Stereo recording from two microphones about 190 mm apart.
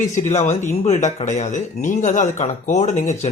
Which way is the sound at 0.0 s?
40° left (ahead or behind).